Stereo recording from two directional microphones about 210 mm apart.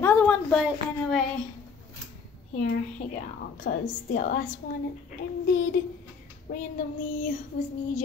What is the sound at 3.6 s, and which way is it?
Speech, 45° left (ahead or behind).